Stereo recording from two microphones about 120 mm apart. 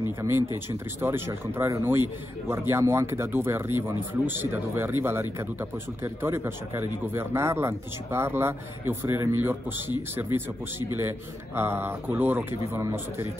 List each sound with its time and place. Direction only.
0.2 s speech: 20° right (ahead or behind)